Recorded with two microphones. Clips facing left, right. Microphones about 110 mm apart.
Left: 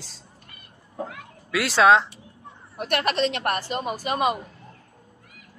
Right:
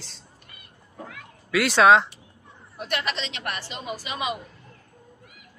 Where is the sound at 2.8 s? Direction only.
55° left (ahead or behind).